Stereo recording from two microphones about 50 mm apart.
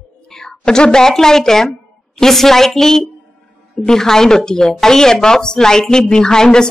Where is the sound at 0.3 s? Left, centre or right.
Centre.